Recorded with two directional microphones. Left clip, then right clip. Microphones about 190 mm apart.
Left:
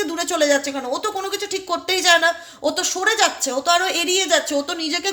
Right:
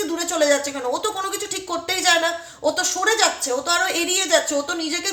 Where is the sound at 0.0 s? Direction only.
35° left (ahead or behind).